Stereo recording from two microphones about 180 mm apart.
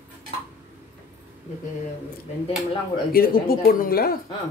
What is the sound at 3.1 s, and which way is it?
Speech, 55° left (ahead or behind).